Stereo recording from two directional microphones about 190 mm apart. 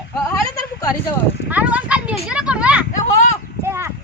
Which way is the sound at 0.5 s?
20° left (ahead or behind).